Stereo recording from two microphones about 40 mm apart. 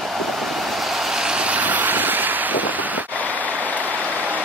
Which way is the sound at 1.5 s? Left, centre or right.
Right.